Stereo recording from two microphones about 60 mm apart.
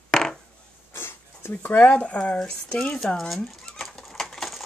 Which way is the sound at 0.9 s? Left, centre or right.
Left.